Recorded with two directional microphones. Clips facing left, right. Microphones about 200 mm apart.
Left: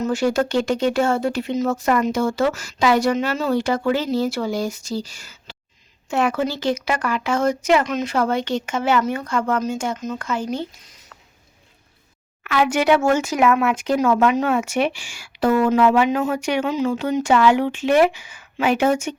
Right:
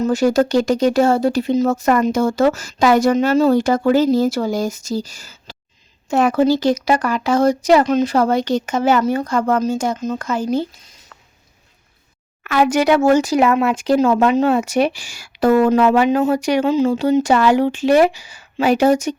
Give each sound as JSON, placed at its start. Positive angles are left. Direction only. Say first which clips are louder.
{"t": 0.0, "sound": "speech", "louder": "right 5 dB", "side_deg": -40}
{"t": 12.4, "sound": "speech", "louder": "right 4 dB", "side_deg": -40}